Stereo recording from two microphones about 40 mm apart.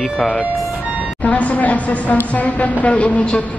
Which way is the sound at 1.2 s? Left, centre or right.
Left.